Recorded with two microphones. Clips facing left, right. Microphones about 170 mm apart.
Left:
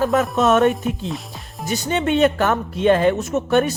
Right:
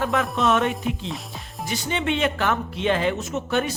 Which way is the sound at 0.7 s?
Centre (ahead or behind).